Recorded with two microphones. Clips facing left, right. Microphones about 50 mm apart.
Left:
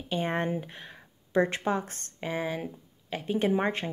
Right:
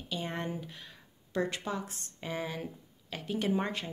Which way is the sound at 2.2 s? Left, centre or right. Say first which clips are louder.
Left 5 dB; left.